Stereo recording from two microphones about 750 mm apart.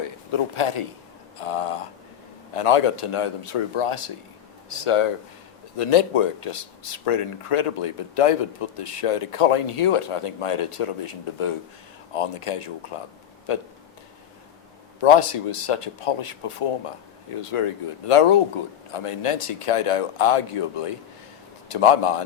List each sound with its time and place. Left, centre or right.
0.3 s speech: left
15.0 s speech: left